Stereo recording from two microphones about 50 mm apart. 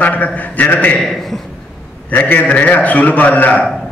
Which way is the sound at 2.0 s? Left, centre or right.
Left.